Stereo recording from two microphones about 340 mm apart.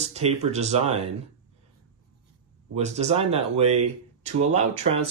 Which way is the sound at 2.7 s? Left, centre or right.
Centre.